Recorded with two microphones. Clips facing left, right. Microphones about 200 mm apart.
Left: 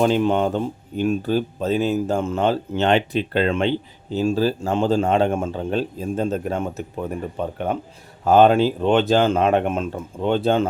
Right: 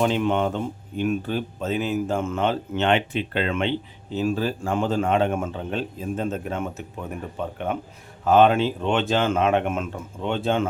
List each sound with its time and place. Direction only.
0.0 s speech: 40° left (ahead or behind)